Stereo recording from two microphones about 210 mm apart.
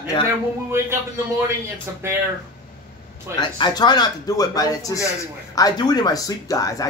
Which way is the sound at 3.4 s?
20° left (ahead or behind).